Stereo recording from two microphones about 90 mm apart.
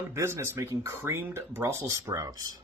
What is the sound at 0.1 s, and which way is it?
Speech, 30° right (ahead or behind).